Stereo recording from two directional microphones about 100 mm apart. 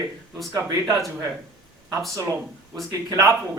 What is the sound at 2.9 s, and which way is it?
Speech, 30° right (ahead or behind).